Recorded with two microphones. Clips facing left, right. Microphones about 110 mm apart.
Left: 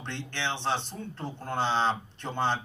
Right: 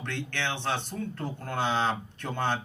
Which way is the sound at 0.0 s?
25° left (ahead or behind).